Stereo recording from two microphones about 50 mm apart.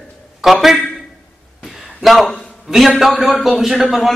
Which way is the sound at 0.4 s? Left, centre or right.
Centre.